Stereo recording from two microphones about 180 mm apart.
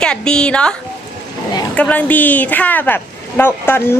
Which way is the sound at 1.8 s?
5° left (ahead or behind).